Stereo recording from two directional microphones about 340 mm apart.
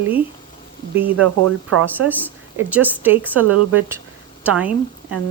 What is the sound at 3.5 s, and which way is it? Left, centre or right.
Speech, right.